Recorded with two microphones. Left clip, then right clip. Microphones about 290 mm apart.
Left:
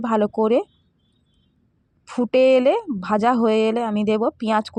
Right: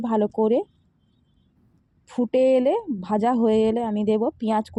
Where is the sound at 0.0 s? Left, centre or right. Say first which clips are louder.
Left 2 dB; left.